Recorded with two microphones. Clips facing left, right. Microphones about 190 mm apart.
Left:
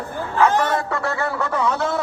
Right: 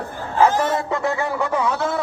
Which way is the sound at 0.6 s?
20° right (ahead or behind).